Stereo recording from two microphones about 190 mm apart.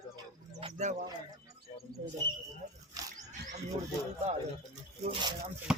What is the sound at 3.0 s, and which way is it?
Wild animals, 20° right (ahead or behind).